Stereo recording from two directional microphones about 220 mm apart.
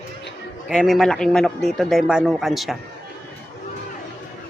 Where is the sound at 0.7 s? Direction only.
Centre (ahead or behind).